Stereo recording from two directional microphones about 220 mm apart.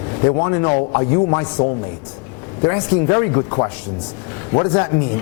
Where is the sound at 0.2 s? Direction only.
20° left (ahead or behind).